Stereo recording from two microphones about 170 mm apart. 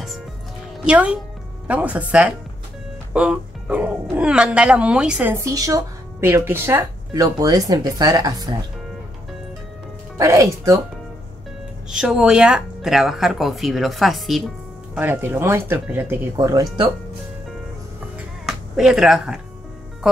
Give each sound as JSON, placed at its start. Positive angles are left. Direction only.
{"t": 0.8, "sound": "speech", "side_deg": -5}
{"t": 5.3, "sound": "speech", "side_deg": -20}
{"t": 10.1, "sound": "speech", "side_deg": -20}
{"t": 11.9, "sound": "speech", "side_deg": -5}
{"t": 15.0, "sound": "speech", "side_deg": -10}
{"t": 16.3, "sound": "speech", "side_deg": -20}
{"t": 18.4, "sound": "speech", "side_deg": 0}